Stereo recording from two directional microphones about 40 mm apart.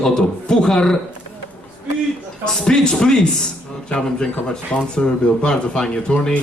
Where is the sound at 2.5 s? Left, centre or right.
Centre.